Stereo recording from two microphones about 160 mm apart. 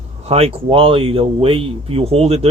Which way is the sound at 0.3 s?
40° right (ahead or behind).